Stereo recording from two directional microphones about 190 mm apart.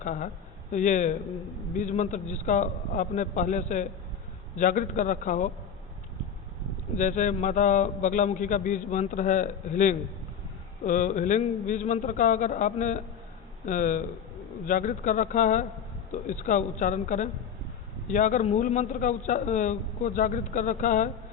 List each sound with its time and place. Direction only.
0.0 s a man's voice: 40° left (ahead or behind)
6.9 s a man's voice: 40° left (ahead or behind)